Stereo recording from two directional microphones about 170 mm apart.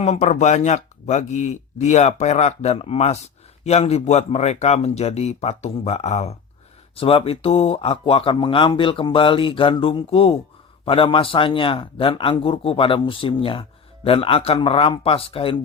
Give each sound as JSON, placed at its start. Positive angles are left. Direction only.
{"t": 0.0, "sound": "a man's voice", "side_deg": 40}